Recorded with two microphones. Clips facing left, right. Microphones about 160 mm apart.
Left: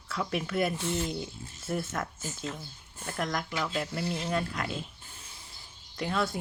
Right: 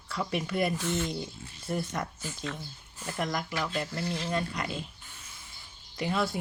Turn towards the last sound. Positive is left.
turn(degrees=0)  # may be behind; listen again after turning